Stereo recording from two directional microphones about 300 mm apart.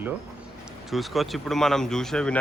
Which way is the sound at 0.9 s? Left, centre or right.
Centre.